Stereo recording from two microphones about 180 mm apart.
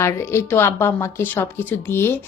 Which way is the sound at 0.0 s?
15° left (ahead or behind).